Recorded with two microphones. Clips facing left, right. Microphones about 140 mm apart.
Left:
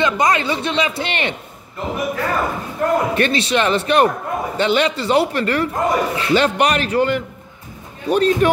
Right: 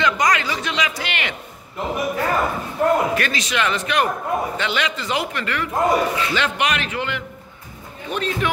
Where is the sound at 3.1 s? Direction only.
30° left (ahead or behind).